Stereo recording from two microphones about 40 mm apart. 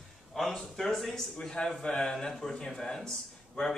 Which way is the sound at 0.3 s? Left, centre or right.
Centre.